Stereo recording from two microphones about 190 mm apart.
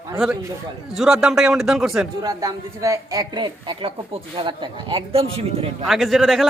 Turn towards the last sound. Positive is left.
turn(degrees=0)  # may be behind; listen again after turning